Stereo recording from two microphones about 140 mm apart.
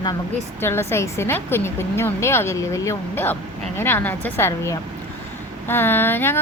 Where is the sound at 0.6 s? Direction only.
15° left (ahead or behind).